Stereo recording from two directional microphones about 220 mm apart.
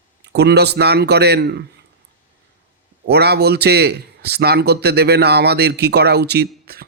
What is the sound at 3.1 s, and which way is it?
A man's voice, 45° right (ahead or behind).